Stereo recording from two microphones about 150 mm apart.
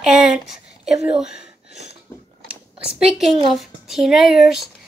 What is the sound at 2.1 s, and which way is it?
Mechanisms, 20° left (ahead or behind).